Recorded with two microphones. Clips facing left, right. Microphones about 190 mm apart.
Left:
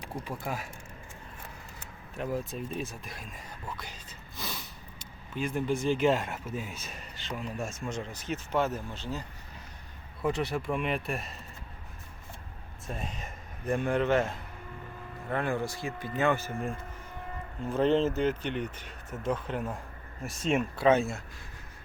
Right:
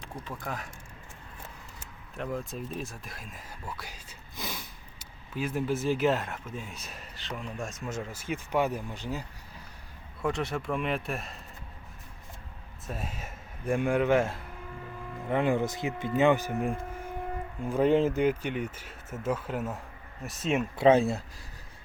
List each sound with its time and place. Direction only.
0.1 s speech: 10° left (ahead or behind)
2.1 s speech: centre (ahead or behind); by 9.2 s 15° right (ahead or behind)
10.2 s speech: centre (ahead or behind)
12.9 s speech: 5° right (ahead or behind)
15.3 s cattle: 20° right (ahead or behind)
17.7 s speech: 10° right (ahead or behind)
20.7 s cattle: 30° right (ahead or behind)